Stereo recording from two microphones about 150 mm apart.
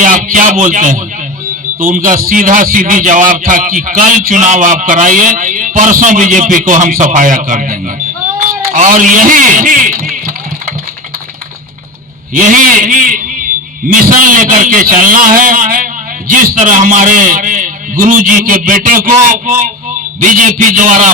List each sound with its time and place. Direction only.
0.0 s a man's voice: 60° right (ahead or behind)
8.4 s a sound: 60° right (ahead or behind)
12.3 s a man's voice: 60° right (ahead or behind)